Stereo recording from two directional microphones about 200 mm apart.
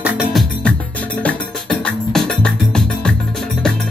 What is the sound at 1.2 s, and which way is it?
Music, 5° left (ahead or behind).